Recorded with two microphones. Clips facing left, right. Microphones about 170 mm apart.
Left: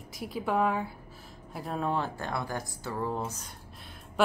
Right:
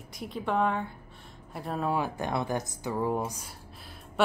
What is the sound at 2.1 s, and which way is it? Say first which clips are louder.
Speech: right 4 dB; 20° right (ahead or behind).